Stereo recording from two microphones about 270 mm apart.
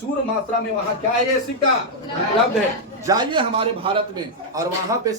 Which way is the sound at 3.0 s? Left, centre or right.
Centre.